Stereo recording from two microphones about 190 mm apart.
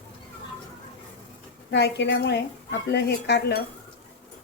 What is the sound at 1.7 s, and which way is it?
A woman's voice, 65° left (ahead or behind).